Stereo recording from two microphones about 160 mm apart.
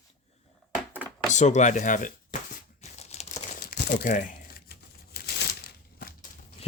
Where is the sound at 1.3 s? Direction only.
50° left (ahead or behind).